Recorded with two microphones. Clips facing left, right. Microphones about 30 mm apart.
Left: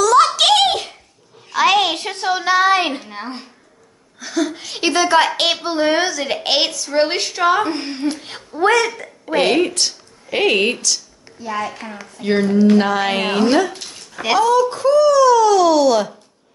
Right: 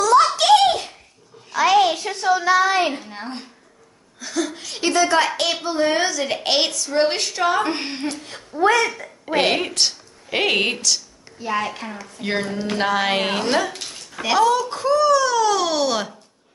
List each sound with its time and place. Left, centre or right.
0.0 s a sound: left
1.5 s a sound: left
3.1 s a woman's voice: centre
4.2 s a sound: centre
4.9 s a woman's voice: left
5.8 s a woman's voice: left
7.7 s a woman's voice: right
8.1 s a woman's voice: left
8.5 s speech: left
9.2 s a woman's voice: centre
12.2 s speech: centre